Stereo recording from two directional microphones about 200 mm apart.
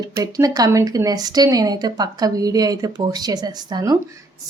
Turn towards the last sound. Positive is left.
turn(degrees=-20)  # may be behind; listen again after turning